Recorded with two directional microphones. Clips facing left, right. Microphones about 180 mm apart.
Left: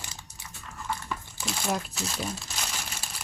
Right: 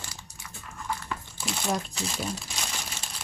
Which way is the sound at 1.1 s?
Centre (ahead or behind).